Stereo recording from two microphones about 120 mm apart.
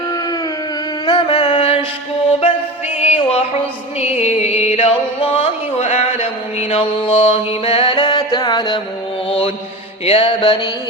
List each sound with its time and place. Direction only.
1.0 s a sound: 40° left (ahead or behind)
3.0 s music: 55° left (ahead or behind); by 8.8 s 35° left (ahead or behind)
10.1 s music: 50° left (ahead or behind)